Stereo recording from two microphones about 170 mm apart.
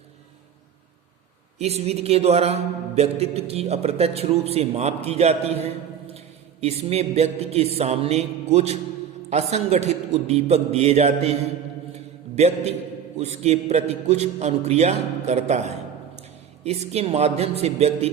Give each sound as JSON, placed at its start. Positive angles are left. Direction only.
{"t": 1.5, "sound": "a man's voice", "side_deg": -40}
{"t": 6.1, "sound": "a sound", "side_deg": -35}
{"t": 9.3, "sound": "a man's voice", "side_deg": -40}
{"t": 12.4, "sound": "a man's voice", "side_deg": -40}